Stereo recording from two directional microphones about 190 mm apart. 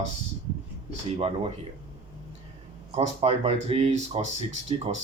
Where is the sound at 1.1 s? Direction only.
30° right (ahead or behind).